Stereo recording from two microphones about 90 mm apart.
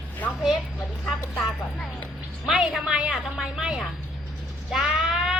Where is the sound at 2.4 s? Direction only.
5° right (ahead or behind).